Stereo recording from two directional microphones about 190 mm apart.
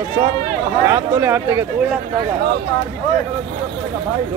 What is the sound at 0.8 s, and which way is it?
Speech, 15° right (ahead or behind).